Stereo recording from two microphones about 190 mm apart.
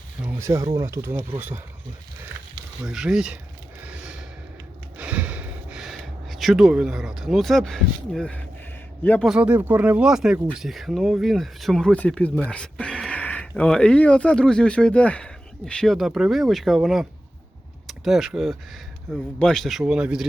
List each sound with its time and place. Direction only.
0.2 s speech: 10° right (ahead or behind)
2.8 s speech: 5° right (ahead or behind)
3.8 s gasp: 5° right (ahead or behind)
9.2 s speech: 5° right (ahead or behind)
12.5 s a sound: 5° left (ahead or behind)
13.6 s speech: 5° left (ahead or behind)